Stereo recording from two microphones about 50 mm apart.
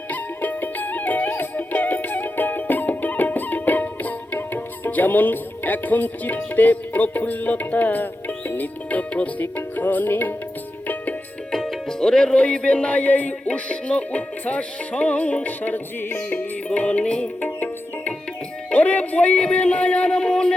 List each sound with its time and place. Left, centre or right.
0.1 s music: left
11.5 s music: centre; by 16.5 s left
16.6 s music: left
17.4 s music: left; by 20.5 s centre